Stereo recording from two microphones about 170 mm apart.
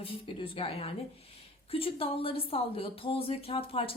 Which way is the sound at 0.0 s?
30° left (ahead or behind).